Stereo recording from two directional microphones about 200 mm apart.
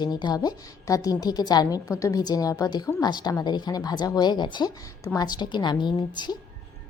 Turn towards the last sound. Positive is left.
turn(degrees=20)  # may be behind; listen again after turning